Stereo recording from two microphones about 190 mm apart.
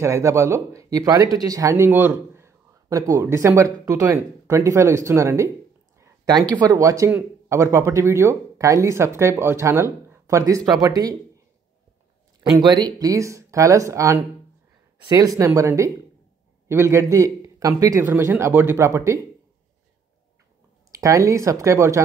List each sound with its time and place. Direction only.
0.0 s speech: 15° right (ahead or behind)
5.9 s a sound: 20° right (ahead or behind)
6.6 s speech: 20° right (ahead or behind)
12.5 s speech: 20° right (ahead or behind)
20.9 s speech: 15° right (ahead or behind)